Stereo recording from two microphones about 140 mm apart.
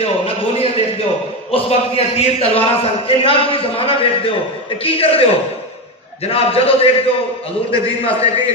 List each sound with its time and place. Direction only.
0.0 s a sound: 40° left (ahead or behind)
1.5 s a man's voice: 45° left (ahead or behind)
6.2 s a man's voice: 45° left (ahead or behind)